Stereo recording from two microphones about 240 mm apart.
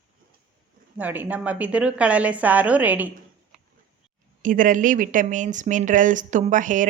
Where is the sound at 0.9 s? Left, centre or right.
Centre.